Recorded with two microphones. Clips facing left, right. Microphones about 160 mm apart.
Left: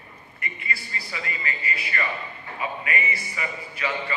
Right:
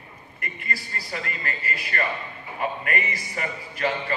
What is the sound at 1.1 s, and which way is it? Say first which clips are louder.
A man's voice: right 1 dB; 50° right (ahead or behind).